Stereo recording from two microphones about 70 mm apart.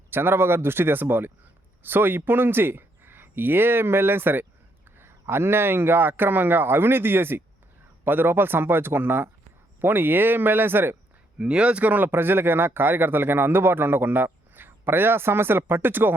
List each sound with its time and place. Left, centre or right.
0.1 s speech: right
11.3 s speech: centre